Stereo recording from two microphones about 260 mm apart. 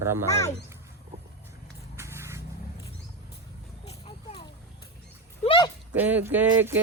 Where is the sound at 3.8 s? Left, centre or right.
Left.